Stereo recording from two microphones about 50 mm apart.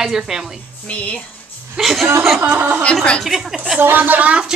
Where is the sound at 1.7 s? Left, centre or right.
Centre.